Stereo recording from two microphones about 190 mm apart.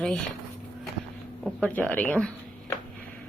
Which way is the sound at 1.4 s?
5° left (ahead or behind).